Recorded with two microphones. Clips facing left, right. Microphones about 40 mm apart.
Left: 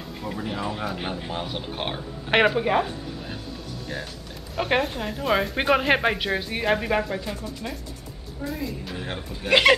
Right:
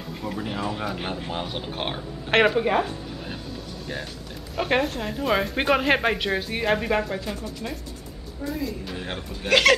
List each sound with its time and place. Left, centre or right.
0.2 s a woman's voice: centre
4.6 s a woman's voice: centre
9.5 s speech: centre